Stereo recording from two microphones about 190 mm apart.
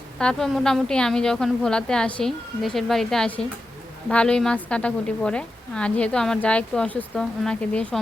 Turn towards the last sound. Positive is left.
turn(degrees=5)  # may be behind; listen again after turning